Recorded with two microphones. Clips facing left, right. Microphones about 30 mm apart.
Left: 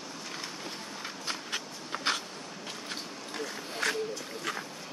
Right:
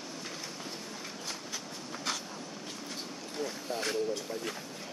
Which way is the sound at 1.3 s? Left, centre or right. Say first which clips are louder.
Left 7 dB; left.